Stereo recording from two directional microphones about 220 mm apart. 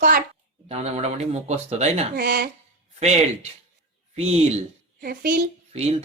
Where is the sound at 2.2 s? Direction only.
45° right (ahead or behind).